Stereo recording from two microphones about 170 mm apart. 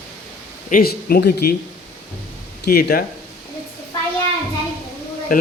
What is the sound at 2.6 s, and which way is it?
Speech, 60° left (ahead or behind).